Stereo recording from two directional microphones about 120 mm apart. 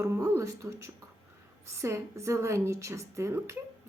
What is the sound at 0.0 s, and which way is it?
A woman's voice, 25° right (ahead or behind).